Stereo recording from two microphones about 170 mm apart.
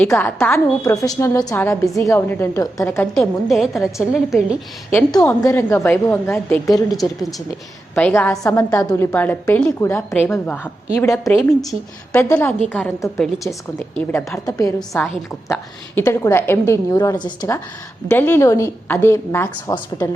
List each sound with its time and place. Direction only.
0.0 s a woman's voice: 10° left (ahead or behind)
3.2 s a woman's voice: centre (ahead or behind)
5.2 s a woman's voice: 15° left (ahead or behind)
6.9 s a woman's voice: centre (ahead or behind)
14.3 s a woman's voice: 20° left (ahead or behind)
14.8 s a woman's voice: 5° left (ahead or behind)
16.0 s a woman's voice: 15° left (ahead or behind)
18.1 s a woman's voice: 15° left (ahead or behind)